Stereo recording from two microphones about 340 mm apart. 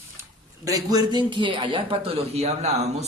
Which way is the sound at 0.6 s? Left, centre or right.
Centre.